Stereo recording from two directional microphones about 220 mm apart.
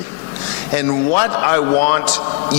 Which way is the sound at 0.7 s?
15° left (ahead or behind).